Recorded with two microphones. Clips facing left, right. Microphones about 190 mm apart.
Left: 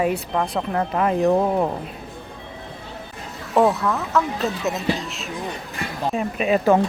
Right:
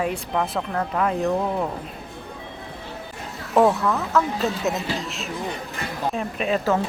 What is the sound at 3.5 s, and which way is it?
Speech, centre (ahead or behind).